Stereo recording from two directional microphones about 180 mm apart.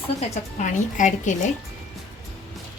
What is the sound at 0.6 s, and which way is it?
Speech, 45° left (ahead or behind).